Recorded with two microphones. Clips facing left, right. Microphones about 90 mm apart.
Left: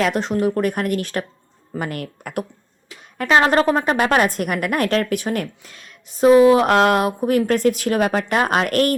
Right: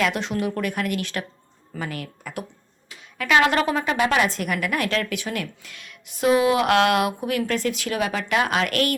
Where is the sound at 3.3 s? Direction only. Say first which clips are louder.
Left 4 dB; 35° left (ahead or behind).